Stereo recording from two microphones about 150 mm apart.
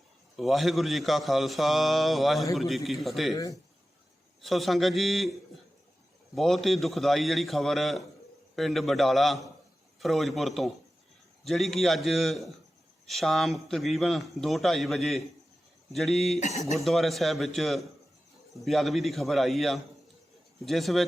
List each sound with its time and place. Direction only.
0.3 s a man's voice: centre (ahead or behind)
3.3 s speech: 25° left (ahead or behind)
4.4 s a man's voice: centre (ahead or behind)
6.3 s a man's voice: centre (ahead or behind)
16.4 s speech: 45° left (ahead or behind)
16.7 s a man's voice: centre (ahead or behind)